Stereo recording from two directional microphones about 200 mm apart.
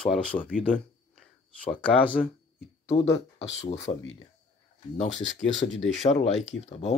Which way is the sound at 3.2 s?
65° left (ahead or behind).